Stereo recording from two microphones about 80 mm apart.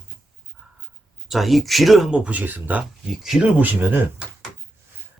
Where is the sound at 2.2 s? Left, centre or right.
Right.